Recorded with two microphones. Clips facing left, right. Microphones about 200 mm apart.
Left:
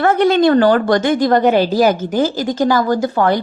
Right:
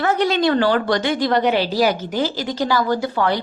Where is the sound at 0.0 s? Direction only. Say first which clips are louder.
Left 6 dB; 55° left (ahead or behind).